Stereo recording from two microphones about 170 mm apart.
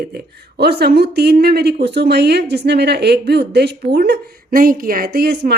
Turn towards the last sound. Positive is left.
turn(degrees=-65)  # may be behind; listen again after turning